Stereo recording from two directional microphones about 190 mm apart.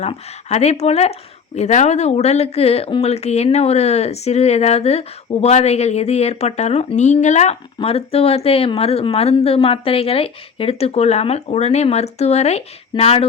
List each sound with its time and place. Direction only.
0.0 s speech: 35° left (ahead or behind)